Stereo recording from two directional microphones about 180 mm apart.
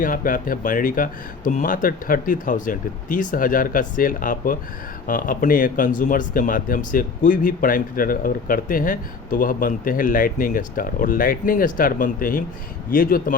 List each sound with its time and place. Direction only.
0.0 s a man's voice: 50° left (ahead or behind)